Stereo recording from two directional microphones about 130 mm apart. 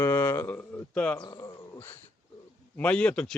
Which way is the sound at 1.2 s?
30° left (ahead or behind).